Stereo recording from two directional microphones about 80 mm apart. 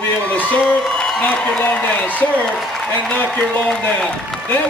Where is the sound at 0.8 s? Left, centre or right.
Centre.